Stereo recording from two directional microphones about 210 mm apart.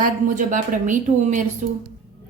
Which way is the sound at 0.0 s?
40° right (ahead or behind).